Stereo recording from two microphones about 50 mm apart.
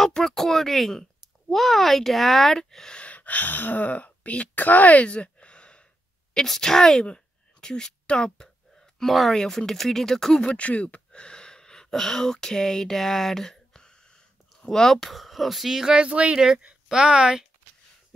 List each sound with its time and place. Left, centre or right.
0.0 s speech: centre
3.0 s speech: left
6.3 s speech: centre
7.6 s a sound: centre
9.0 s speech: centre
10.4 s speech: left
11.1 s speech: centre
16.1 s speech: right
16.3 s speech: centre